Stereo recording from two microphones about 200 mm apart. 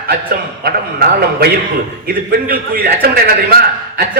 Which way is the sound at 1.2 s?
50° right (ahead or behind).